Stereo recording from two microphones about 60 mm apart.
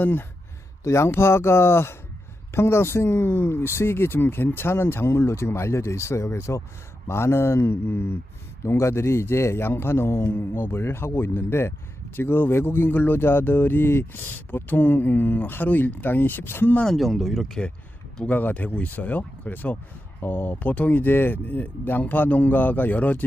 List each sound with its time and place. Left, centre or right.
0.0 s speech: left
0.9 s speech: left
10.3 s speech: left
16.8 s speech: centre
18.3 s speech: left